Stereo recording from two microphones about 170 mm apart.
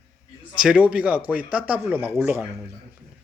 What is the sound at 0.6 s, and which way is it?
Speech, 5° right (ahead or behind).